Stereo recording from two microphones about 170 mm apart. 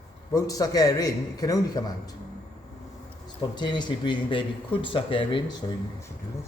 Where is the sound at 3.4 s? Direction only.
25° left (ahead or behind).